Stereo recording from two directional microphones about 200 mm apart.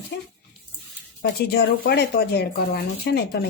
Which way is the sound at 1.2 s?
55° left (ahead or behind).